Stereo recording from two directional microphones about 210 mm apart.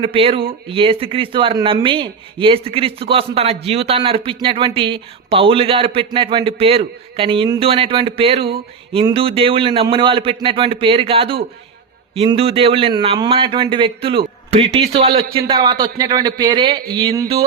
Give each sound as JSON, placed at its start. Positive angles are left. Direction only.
{"t": 0.0, "sound": "speech", "side_deg": -25}